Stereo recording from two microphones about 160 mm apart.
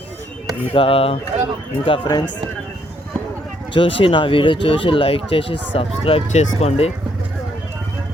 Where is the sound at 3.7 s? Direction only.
35° left (ahead or behind).